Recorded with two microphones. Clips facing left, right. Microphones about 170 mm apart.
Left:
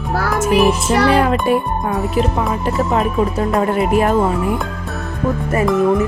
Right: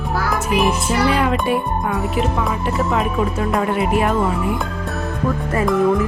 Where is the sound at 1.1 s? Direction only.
40° left (ahead or behind).